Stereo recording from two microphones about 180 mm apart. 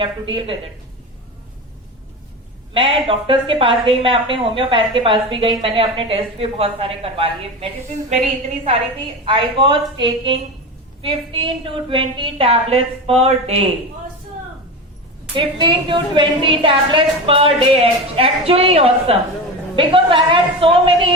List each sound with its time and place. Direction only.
0.0 s a woman's voice: 30° right (ahead or behind)
2.7 s a woman's voice: 30° right (ahead or behind)
9.2 s a woman's voice: 30° right (ahead or behind)
15.4 s a woman's voice: 25° right (ahead or behind)